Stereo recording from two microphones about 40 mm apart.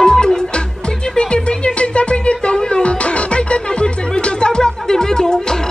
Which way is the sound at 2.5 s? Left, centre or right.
Centre.